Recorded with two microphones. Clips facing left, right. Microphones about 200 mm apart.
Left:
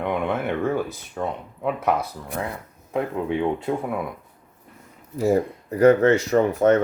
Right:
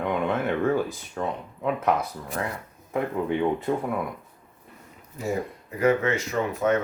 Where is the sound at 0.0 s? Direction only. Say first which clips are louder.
Left 1 dB; 10° left (ahead or behind).